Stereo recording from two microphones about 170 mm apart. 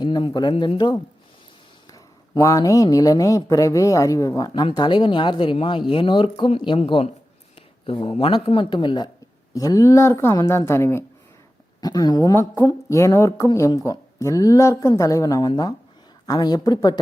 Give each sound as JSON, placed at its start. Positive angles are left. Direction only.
{"t": 0.0, "sound": "a woman's voice", "side_deg": 25}